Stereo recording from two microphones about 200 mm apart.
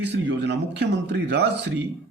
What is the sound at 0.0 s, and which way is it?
Speech, 60° right (ahead or behind).